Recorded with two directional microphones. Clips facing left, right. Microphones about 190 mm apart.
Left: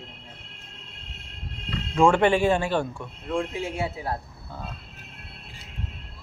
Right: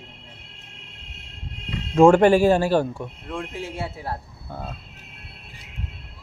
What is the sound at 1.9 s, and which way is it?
Speech, 40° right (ahead or behind).